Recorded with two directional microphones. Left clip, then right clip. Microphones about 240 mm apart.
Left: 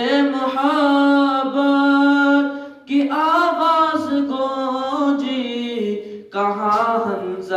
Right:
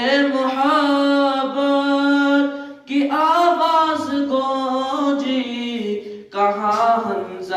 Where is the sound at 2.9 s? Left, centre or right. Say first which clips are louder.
Even; left.